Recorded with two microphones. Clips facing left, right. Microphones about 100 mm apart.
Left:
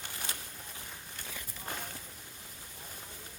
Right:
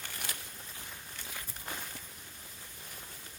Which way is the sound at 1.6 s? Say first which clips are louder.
Left 3 dB; 40° left (ahead or behind).